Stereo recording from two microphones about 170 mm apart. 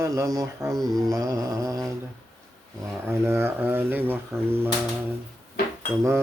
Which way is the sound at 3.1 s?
15° right (ahead or behind).